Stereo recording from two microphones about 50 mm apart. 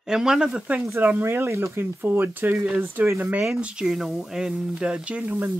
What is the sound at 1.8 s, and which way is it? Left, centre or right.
Speech, right.